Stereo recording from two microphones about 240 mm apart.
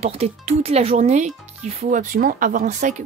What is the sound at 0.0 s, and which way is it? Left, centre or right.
Speech, right.